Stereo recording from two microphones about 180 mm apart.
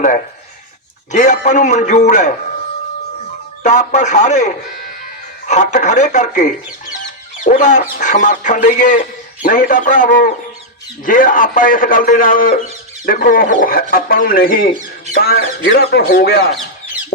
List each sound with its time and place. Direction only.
1.1 s a man's voice: 40° left (ahead or behind)
3.6 s a man's voice: 40° left (ahead or behind); by 16.6 s 60° left (ahead or behind)